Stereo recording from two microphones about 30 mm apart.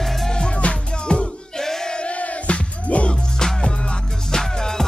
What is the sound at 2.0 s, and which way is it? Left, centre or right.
Music, left.